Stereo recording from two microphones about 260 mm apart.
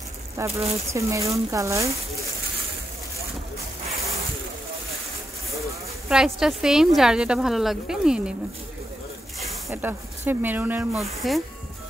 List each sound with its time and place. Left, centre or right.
0.5 s speech: right
0.9 s speech: centre
6.0 s a woman's voice: centre
9.7 s a woman's voice: centre